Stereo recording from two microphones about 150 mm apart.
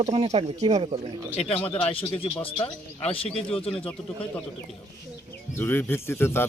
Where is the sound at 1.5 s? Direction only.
40° left (ahead or behind).